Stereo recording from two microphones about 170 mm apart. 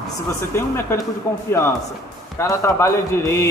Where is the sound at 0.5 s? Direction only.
15° left (ahead or behind).